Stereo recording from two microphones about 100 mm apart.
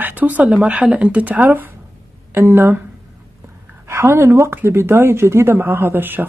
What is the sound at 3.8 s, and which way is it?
Speech, 30° right (ahead or behind).